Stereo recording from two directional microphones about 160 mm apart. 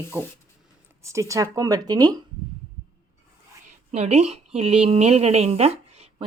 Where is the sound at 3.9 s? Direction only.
45° right (ahead or behind).